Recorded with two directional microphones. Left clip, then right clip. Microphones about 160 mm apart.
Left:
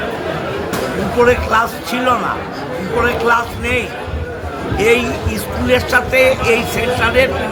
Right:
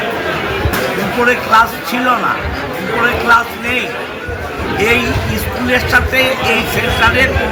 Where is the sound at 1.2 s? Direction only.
40° left (ahead or behind).